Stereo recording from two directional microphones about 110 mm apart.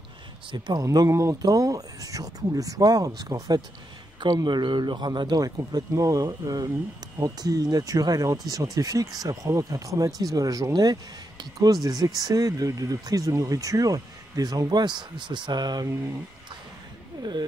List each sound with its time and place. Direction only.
0.5 s speech: 40° right (ahead or behind)
0.8 s speech: 30° right (ahead or behind)
17.2 s speech: 40° right (ahead or behind)